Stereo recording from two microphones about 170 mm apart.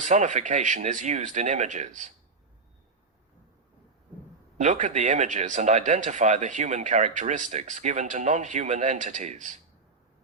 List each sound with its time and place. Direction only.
0.0 s speech: 45° right (ahead or behind)
4.5 s speech: 45° right (ahead or behind)